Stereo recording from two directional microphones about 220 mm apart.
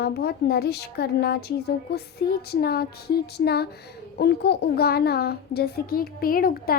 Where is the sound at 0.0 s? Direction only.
45° left (ahead or behind).